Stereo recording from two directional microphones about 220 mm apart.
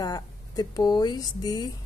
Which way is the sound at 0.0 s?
15° left (ahead or behind).